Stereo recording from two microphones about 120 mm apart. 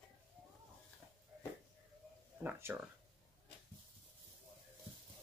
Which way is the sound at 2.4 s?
15° right (ahead or behind).